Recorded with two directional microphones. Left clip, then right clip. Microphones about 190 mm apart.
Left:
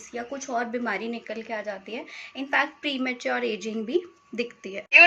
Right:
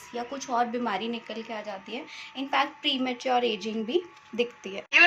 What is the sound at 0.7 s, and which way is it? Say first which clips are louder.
Speech: left 1 dB; 40° right (ahead or behind).